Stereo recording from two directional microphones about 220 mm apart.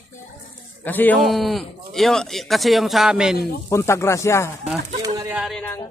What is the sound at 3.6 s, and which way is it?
Speech, 10° left (ahead or behind).